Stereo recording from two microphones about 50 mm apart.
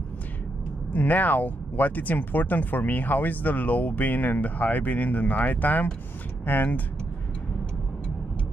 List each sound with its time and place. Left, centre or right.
0.9 s speech: left